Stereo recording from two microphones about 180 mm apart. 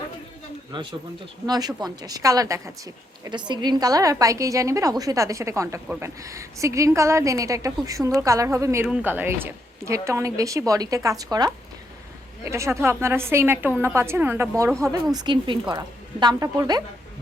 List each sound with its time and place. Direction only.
0.7 s a woman's voice: 25° right (ahead or behind); by 14.5 s 10° right (ahead or behind)
15.1 s a woman's voice: 25° right (ahead or behind)